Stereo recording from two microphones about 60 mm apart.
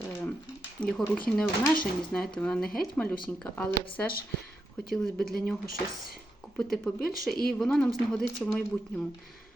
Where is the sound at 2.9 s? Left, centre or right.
Left.